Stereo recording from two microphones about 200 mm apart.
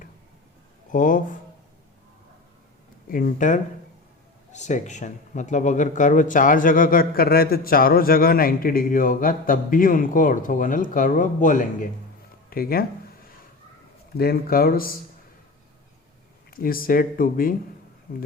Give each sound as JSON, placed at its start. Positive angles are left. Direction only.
{"t": 0.9, "sound": "speech", "side_deg": 40}
{"t": 3.1, "sound": "speech", "side_deg": 40}
{"t": 14.2, "sound": "speech", "side_deg": 50}
{"t": 16.5, "sound": "speech", "side_deg": 45}